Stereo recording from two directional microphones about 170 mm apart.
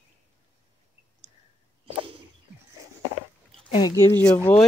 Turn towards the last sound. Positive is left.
turn(degrees=5)  # may be behind; listen again after turning